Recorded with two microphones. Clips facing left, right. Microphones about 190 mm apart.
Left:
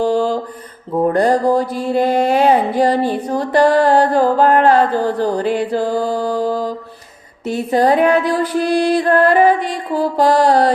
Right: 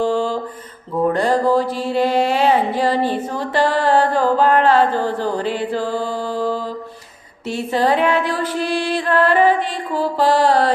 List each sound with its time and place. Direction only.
0.0 s mantra: 40° left (ahead or behind)
1.1 s a sound: 45° left (ahead or behind)
1.7 s music: 45° left (ahead or behind)
7.4 s music: 40° left (ahead or behind)